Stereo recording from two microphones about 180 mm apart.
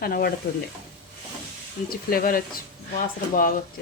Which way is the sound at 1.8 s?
55° left (ahead or behind).